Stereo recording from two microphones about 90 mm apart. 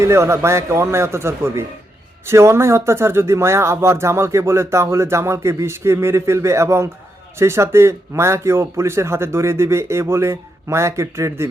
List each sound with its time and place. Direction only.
0.0 s speech: 30° right (ahead or behind)